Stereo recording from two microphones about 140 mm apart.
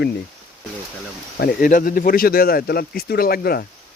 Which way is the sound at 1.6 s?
85° left.